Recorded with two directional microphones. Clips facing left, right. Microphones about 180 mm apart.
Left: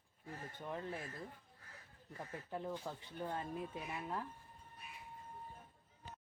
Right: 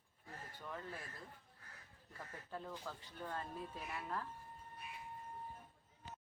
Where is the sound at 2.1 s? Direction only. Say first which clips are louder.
Left 4 dB; 20° left (ahead or behind).